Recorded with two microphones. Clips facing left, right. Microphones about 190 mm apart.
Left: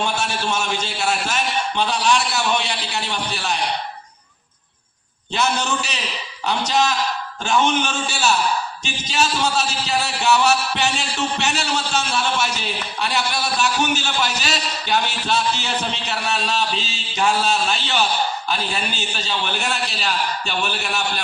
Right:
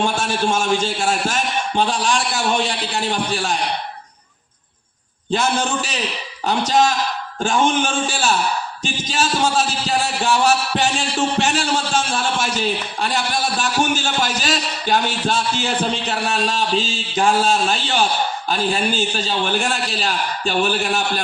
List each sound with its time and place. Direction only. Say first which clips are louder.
0.0 s a man's voice: right 4 dB; 50° right (ahead or behind)
5.3 s a man's voice: right 2 dB; 50° right (ahead or behind)